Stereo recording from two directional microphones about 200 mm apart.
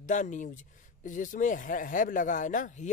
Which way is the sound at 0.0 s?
40° left (ahead or behind).